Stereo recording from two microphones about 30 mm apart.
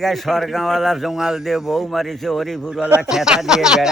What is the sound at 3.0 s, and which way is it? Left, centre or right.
Speech, centre.